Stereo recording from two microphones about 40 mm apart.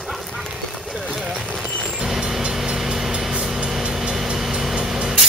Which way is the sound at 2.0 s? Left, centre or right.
Centre.